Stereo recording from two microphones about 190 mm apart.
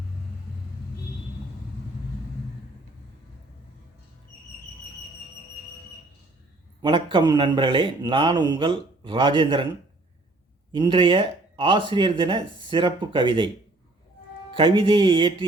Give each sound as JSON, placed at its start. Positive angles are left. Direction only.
{"t": 6.8, "sound": "speech", "side_deg": -25}
{"t": 10.7, "sound": "speech", "side_deg": -25}
{"t": 14.5, "sound": "speech", "side_deg": -25}